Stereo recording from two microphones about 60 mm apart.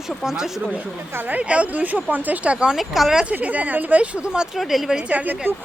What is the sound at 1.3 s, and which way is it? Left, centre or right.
Speech, right.